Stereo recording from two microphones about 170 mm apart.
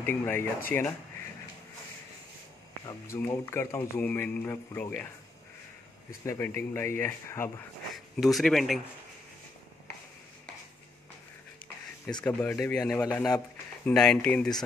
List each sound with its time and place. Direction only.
0.0 s a man's voice: 10° left (ahead or behind)
2.8 s a man's voice: 20° left (ahead or behind)
6.2 s a man's voice: 15° left (ahead or behind)
7.9 s speech: centre (ahead or behind)
11.6 s a sound: 5° left (ahead or behind)
12.5 s speech: 5° left (ahead or behind)